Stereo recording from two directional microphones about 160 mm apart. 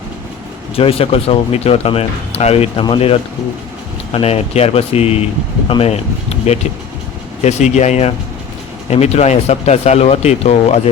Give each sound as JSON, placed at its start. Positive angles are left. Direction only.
{"t": 0.8, "sound": "speech", "side_deg": 35}